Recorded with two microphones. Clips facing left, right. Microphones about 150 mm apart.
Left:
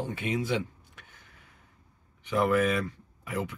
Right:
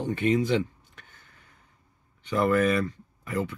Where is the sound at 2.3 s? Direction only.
10° left (ahead or behind).